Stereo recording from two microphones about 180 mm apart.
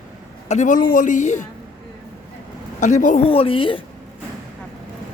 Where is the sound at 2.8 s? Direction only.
45° left (ahead or behind).